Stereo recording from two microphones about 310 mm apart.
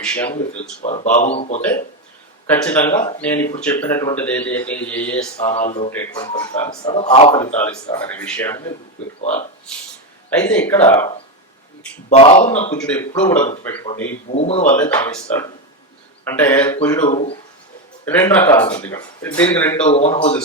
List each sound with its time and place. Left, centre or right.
0.0 s speech: centre
0.6 s speech: left
2.5 s speech: centre
5.4 s speech: left
5.9 s speech: centre
9.2 s speech: left
10.3 s speech: centre
12.0 s speech: left
12.7 s speech: centre
14.3 s speech: centre
14.8 s speech: centre
18.0 s speech: centre
19.9 s speech: centre